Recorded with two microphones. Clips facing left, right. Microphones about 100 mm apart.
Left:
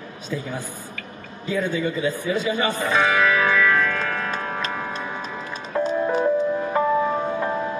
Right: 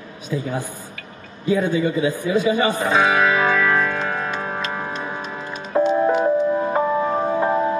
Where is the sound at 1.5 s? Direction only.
15° right (ahead or behind).